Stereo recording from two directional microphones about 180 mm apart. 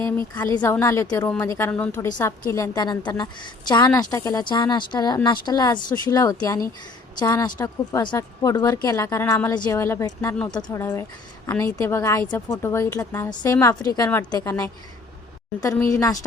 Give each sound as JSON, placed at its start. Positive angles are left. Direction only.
{"t": 0.3, "sound": "a woman's voice", "side_deg": 20}